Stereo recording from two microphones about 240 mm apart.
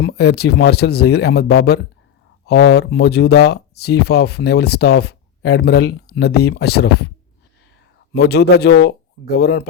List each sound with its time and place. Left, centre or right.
0.0 s speech: left
8.1 s speech: left